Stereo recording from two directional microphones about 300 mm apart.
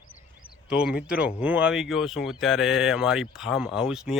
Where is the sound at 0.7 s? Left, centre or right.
Centre.